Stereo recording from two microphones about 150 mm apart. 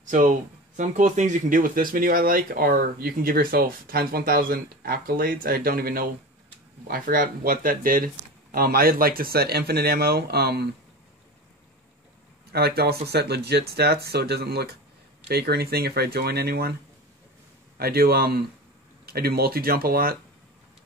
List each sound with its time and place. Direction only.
0.0 s speech: 60° right (ahead or behind)
8.5 s speech: 90° right
12.5 s speech: 90° right
17.7 s speech: 90° right